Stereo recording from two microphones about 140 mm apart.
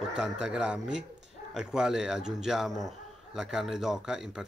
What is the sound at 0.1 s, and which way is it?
Speech, 5° right (ahead or behind).